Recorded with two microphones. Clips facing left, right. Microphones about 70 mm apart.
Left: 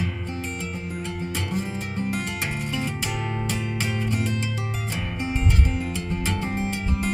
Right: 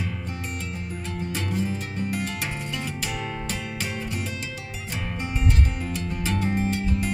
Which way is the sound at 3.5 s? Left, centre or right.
Left.